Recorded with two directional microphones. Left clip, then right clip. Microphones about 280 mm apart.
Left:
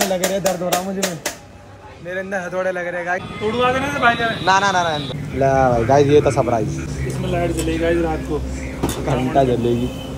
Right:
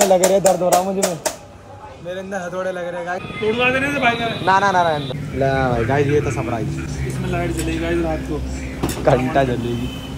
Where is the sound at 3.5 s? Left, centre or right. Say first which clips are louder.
Even; centre.